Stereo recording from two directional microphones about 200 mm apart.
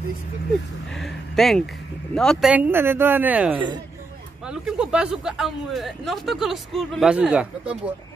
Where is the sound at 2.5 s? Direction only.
10° right (ahead or behind).